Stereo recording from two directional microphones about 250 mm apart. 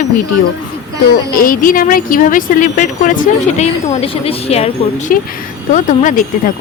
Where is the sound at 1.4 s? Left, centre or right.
Left.